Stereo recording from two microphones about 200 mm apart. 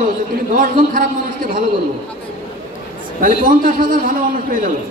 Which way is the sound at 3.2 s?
45° right (ahead or behind).